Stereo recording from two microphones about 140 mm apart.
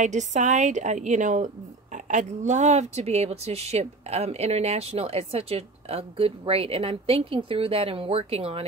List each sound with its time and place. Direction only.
0.0 s a woman's voice: 60° right (ahead or behind)